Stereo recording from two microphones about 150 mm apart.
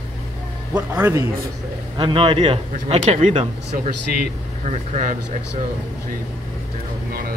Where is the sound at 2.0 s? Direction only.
35° right (ahead or behind).